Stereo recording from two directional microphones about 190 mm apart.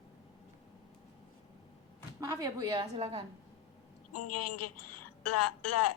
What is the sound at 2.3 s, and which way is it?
Speech, 20° right (ahead or behind).